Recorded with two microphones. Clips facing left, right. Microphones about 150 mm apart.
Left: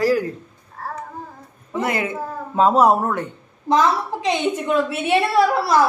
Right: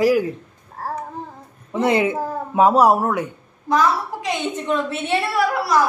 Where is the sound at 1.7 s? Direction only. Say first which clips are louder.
Right 5 dB; 25° right (ahead or behind).